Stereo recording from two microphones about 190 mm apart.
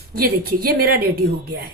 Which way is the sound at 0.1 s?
50° right (ahead or behind).